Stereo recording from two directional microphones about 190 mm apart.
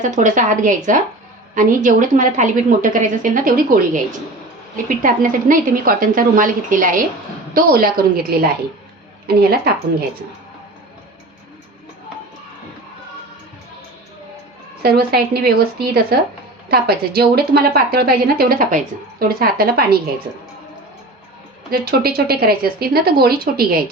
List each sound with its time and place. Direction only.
0.0 s a woman's voice: 40° right (ahead or behind)
5.0 s a woman's voice: 45° right (ahead or behind)
14.8 s a woman's voice: 55° right (ahead or behind)
21.7 s a woman's voice: 55° right (ahead or behind)